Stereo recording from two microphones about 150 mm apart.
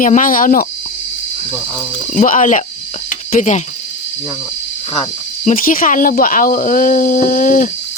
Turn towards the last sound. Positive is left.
turn(degrees=65)  # may be behind; listen again after turning